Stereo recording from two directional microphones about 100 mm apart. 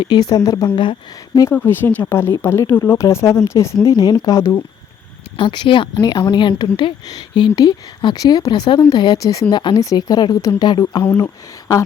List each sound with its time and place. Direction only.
0.0 s a woman's voice: 45° left (ahead or behind)
1.5 s a woman's voice: 20° left (ahead or behind)
5.4 s a woman's voice: 55° left (ahead or behind)
9.2 s a woman's voice: 35° left (ahead or behind)
9.5 s a woman's voice: 45° left (ahead or behind)